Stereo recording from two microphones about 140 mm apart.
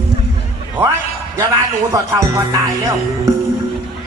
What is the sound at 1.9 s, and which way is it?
Speech, 20° right (ahead or behind).